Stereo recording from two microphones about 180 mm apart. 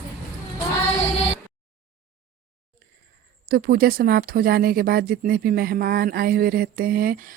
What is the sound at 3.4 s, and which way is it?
Speech, 55° right (ahead or behind).